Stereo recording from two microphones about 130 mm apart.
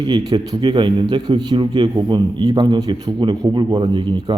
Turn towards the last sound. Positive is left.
turn(degrees=-35)  # may be behind; listen again after turning